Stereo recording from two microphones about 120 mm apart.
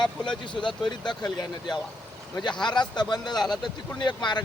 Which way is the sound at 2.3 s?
40° left (ahead or behind).